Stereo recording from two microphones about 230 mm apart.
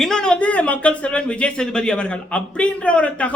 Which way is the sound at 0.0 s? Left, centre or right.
Centre.